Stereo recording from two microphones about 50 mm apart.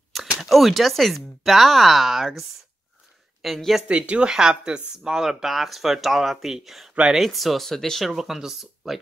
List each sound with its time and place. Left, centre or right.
0.1 s speech: centre
3.4 s speech: centre
3.8 s speech: right; by 8.1 s centre
8.1 s speech: centre